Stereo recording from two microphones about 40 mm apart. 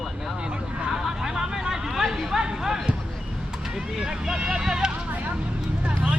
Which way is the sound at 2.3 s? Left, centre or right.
Centre.